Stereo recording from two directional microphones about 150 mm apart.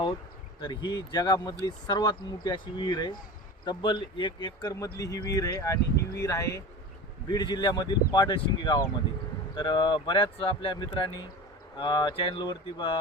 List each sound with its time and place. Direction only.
0.6 s speech: 30° left (ahead or behind)